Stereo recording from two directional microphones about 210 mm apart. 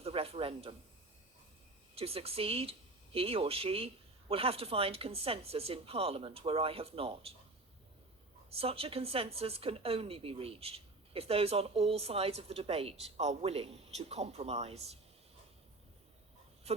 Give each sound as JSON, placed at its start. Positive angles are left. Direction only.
{"t": 0.0, "sound": "a man's voice", "side_deg": -30}
{"t": 2.0, "sound": "a woman's voice", "side_deg": -30}
{"t": 8.4, "sound": "a woman's voice", "side_deg": -25}
{"t": 16.7, "sound": "a sound", "side_deg": -30}